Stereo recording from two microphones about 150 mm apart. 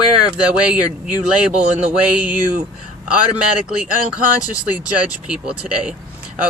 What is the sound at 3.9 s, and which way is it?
Speech, 70° right (ahead or behind).